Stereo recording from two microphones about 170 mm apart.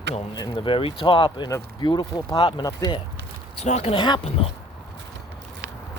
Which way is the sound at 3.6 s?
40° left (ahead or behind).